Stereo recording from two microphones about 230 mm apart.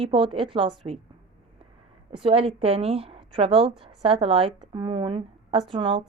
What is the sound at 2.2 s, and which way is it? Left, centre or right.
A woman's voice, right.